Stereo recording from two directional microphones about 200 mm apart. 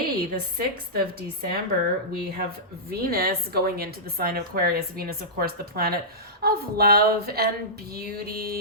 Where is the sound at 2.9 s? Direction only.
50° right (ahead or behind).